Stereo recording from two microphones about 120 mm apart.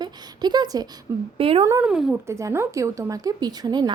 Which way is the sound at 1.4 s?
50° right (ahead or behind).